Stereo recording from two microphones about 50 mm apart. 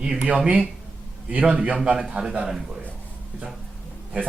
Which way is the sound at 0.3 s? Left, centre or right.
Right.